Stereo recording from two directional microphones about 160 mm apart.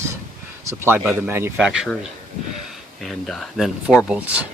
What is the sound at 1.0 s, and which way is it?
Speech, 15° right (ahead or behind).